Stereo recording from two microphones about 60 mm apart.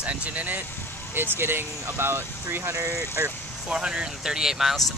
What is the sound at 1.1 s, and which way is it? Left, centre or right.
Speech, right.